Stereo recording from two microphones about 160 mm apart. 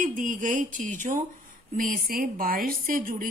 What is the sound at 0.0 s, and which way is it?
Speech, 55° right (ahead or behind).